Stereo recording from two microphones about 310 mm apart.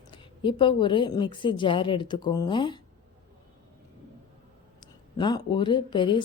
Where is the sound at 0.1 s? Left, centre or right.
Centre.